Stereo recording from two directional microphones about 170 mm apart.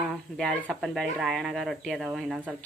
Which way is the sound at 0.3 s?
Centre (ahead or behind).